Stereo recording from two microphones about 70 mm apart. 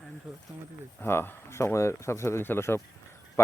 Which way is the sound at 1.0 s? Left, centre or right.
Left.